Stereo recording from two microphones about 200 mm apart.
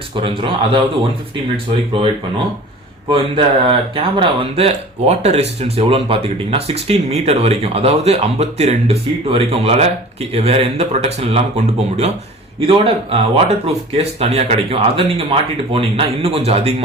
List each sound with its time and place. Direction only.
0.2 s a man's voice: 25° right (ahead or behind)
3.1 s a man's voice: 25° right (ahead or behind)